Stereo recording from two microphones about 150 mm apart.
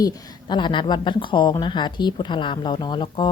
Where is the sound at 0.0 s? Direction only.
30° left (ahead or behind).